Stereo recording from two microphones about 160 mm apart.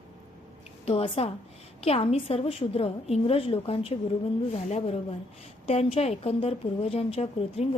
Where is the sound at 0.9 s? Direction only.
40° left (ahead or behind).